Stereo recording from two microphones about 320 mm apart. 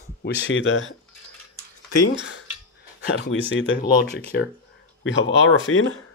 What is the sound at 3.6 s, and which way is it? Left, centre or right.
Speech, left.